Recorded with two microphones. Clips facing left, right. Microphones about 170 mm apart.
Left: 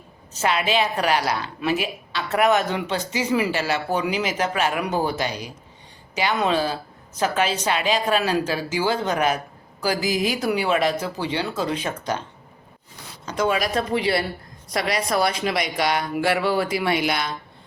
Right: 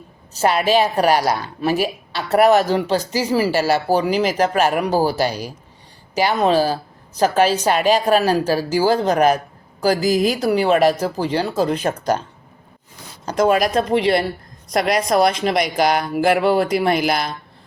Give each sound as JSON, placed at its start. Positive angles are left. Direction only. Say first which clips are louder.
{"t": 0.3, "sound": "a woman's voice", "louder": "right 6 dB", "side_deg": -40}
{"t": 13.2, "sound": "a woman's voice", "louder": "right 6 dB", "side_deg": -40}
{"t": 14.7, "sound": "a woman's voice", "louder": "right 6 dB", "side_deg": -50}
{"t": 15.1, "sound": "a woman's voice", "louder": "right 6 dB", "side_deg": -35}